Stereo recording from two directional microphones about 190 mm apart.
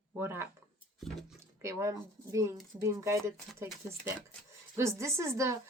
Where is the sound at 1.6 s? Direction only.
15° right (ahead or behind).